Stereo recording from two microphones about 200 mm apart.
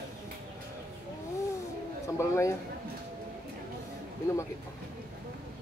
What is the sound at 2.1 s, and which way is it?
Speech, 15° left (ahead or behind).